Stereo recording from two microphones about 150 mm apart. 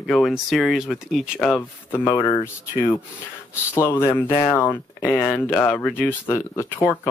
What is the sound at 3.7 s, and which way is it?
Speech, 20° left (ahead or behind).